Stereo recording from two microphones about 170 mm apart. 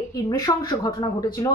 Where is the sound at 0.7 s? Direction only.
25° left (ahead or behind).